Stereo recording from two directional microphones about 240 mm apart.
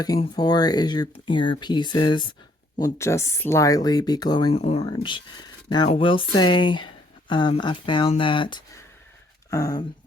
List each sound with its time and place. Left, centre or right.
0.0 s speech: centre